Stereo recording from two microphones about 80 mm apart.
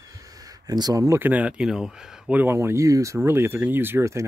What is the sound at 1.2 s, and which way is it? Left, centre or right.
Speech, centre.